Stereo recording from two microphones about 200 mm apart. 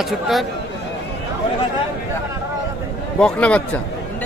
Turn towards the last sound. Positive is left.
turn(degrees=5)  # may be behind; listen again after turning